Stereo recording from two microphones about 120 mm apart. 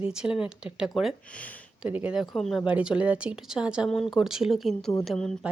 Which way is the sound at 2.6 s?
10° right (ahead or behind).